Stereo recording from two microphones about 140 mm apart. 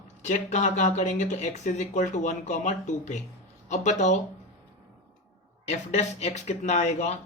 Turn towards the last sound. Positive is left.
turn(degrees=55)  # may be behind; listen again after turning